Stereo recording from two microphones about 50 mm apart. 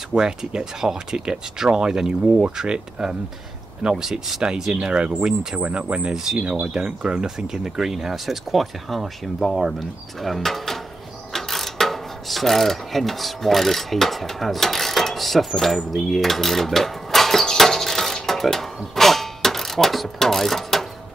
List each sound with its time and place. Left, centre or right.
0.1 s speech: centre
4.4 s speech: centre
6.1 s speech: centre
6.4 s speech: right; by 10.8 s centre
11.3 s mechanisms: centre